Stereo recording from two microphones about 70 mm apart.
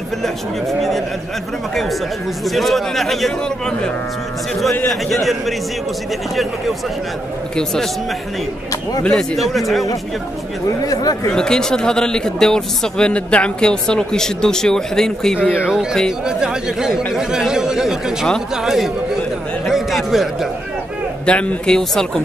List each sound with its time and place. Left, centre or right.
0.2 s a man's voice: centre
2.4 s a man's voice: centre
7.5 s speech: centre
9.0 s a man's voice: centre
10.8 s speech: left
11.3 s speech: centre
15.7 s speech: centre
19.6 s a sound: centre
21.3 s speech: centre